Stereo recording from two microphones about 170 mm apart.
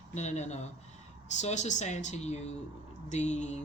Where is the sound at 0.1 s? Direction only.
40° left (ahead or behind).